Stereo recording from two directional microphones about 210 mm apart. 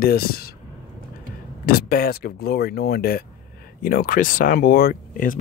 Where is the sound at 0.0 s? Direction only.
45° left (ahead or behind).